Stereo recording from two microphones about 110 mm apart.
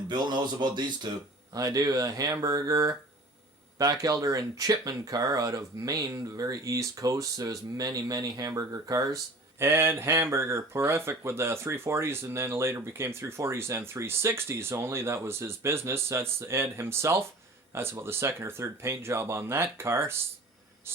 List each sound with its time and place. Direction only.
0.1 s speech: 45° right (ahead or behind)
4.0 s speech: 35° right (ahead or behind)